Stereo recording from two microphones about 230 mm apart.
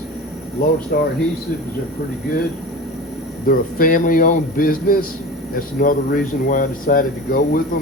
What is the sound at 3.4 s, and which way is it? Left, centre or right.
Speech, left.